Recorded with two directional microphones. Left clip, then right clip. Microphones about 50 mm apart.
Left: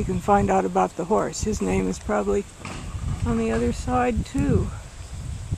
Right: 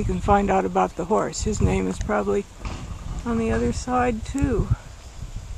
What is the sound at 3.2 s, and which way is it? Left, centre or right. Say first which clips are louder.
Speech: even; centre.